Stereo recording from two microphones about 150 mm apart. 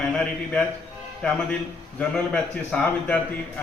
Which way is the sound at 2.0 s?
5° left (ahead or behind).